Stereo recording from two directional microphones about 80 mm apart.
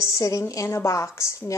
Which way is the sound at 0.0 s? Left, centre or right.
Left.